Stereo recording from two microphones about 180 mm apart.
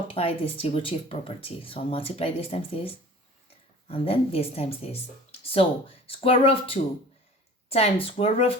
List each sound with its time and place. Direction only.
0.1 s speech: 30° left (ahead or behind)